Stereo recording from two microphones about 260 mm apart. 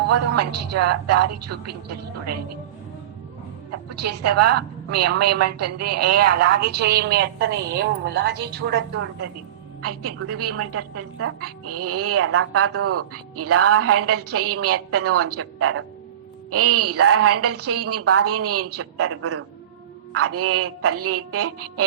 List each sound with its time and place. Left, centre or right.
0.1 s a woman's voice: right
3.8 s a woman's voice: right
6.6 s a woman's voice: right
9.8 s a woman's voice: right